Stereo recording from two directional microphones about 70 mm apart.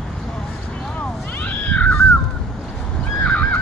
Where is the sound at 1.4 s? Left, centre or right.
Left.